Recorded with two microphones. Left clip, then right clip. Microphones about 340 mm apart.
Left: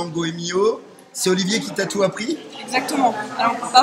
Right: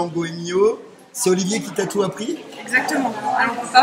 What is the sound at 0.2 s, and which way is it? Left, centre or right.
A woman's voice, centre.